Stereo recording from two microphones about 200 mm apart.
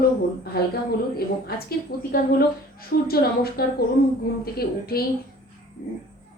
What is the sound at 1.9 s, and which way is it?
Speech, 50° left (ahead or behind).